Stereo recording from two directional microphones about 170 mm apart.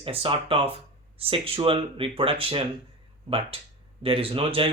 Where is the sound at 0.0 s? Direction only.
30° right (ahead or behind).